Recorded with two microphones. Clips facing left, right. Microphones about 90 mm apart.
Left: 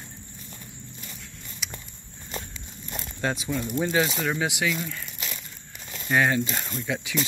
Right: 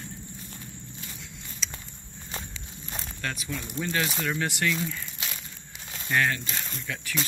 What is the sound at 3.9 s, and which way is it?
Speech, 10° left (ahead or behind).